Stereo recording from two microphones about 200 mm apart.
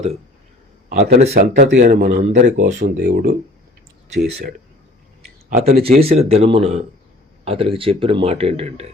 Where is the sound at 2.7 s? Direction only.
55° right (ahead or behind).